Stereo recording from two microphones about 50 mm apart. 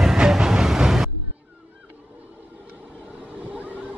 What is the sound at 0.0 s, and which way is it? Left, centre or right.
Train, centre.